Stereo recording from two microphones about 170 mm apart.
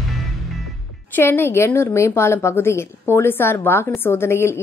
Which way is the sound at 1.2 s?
15° left (ahead or behind).